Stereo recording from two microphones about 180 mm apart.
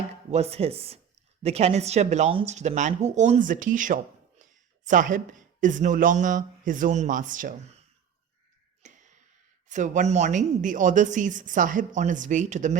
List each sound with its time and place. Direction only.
0.3 s a woman's voice: 35° right (ahead or behind)
8.8 s a sound: 45° right (ahead or behind)
9.6 s a woman's voice: 45° right (ahead or behind)